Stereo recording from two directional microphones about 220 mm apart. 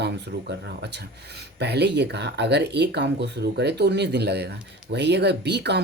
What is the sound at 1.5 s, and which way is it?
Speech, 50° right (ahead or behind).